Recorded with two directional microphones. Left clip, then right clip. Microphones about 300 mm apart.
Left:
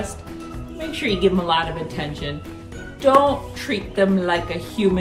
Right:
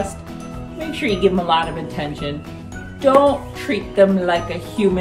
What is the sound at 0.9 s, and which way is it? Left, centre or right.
A woman's voice, centre.